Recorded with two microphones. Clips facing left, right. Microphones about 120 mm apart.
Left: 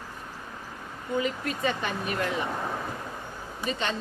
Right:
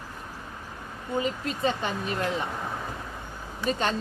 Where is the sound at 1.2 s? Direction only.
25° right (ahead or behind).